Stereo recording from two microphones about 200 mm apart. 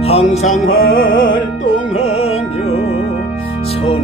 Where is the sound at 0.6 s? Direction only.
90° left.